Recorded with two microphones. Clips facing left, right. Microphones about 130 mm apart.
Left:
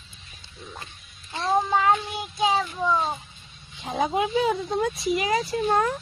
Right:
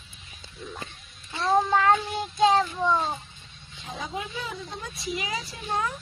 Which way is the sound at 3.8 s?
65° left (ahead or behind).